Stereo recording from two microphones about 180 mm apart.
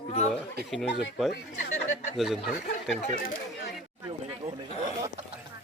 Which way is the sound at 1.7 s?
40° left (ahead or behind).